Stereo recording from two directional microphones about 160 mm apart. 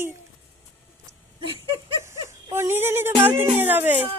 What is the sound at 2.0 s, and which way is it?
Speech, 15° right (ahead or behind).